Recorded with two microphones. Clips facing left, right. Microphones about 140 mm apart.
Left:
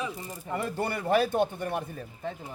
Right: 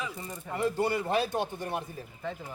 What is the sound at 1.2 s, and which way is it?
Speech, 55° left (ahead or behind).